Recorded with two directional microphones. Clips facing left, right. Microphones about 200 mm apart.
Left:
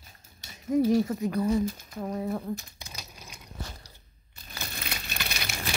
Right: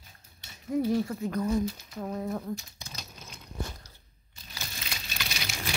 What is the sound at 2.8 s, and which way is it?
Typewriter, 10° left (ahead or behind).